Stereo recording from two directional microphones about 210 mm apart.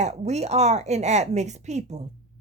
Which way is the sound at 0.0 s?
30° right (ahead or behind).